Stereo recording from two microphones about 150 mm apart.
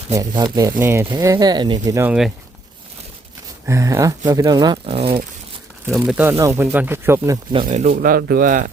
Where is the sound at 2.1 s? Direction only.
Centre (ahead or behind).